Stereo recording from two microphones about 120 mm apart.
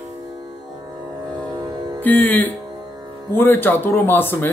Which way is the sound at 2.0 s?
15° left (ahead or behind).